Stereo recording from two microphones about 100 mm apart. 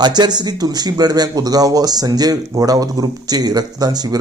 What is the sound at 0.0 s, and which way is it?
A man's voice, 45° right (ahead or behind).